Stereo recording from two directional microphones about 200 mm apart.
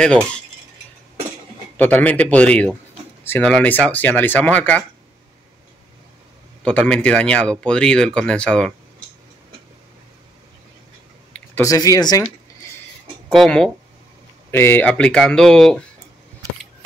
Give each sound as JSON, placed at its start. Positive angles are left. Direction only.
{"t": 0.0, "sound": "speech", "side_deg": 5}
{"t": 1.8, "sound": "speech", "side_deg": 5}
{"t": 6.6, "sound": "speech", "side_deg": 5}
{"t": 11.3, "sound": "speech", "side_deg": 10}
{"t": 13.3, "sound": "speech", "side_deg": 0}